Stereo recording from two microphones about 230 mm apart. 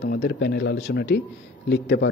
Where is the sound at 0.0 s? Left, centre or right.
Left.